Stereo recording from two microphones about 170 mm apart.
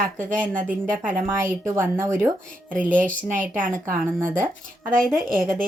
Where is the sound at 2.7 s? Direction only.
50° right (ahead or behind).